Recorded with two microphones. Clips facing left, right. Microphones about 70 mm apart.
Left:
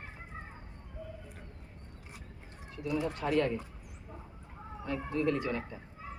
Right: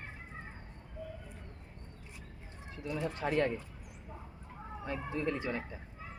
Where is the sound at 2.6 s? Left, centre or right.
Right.